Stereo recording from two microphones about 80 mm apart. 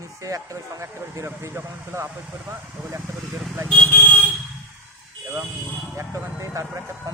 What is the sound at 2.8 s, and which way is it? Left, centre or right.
Speech, centre.